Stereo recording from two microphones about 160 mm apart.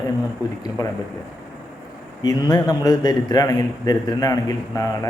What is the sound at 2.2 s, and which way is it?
A man's voice, 25° left (ahead or behind).